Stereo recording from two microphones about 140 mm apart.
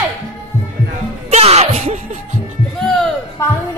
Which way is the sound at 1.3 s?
50° right (ahead or behind).